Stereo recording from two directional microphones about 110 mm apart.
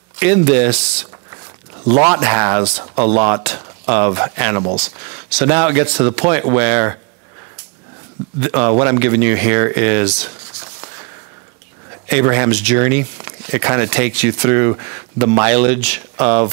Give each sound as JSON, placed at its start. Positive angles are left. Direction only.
{"t": 0.2, "sound": "speech", "side_deg": -15}
{"t": 2.0, "sound": "speech", "side_deg": -15}
{"t": 8.4, "sound": "speech", "side_deg": -15}